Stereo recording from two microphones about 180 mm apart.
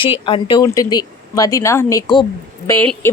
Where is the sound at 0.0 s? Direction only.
30° left (ahead or behind).